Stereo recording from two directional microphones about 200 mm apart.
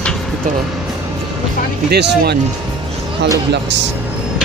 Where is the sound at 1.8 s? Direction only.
55° right (ahead or behind).